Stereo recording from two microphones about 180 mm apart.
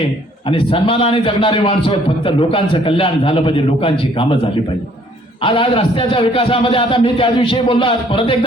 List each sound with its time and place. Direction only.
0.5 s a man's voice: 30° left (ahead or behind)
5.4 s a man's voice: 30° left (ahead or behind)